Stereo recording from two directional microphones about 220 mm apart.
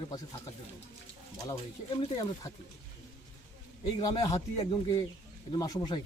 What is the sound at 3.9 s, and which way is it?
Speech, 20° left (ahead or behind).